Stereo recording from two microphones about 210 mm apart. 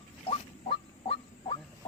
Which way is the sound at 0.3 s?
25° left (ahead or behind).